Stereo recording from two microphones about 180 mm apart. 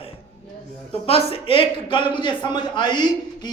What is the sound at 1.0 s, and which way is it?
A man's voice, 30° left (ahead or behind).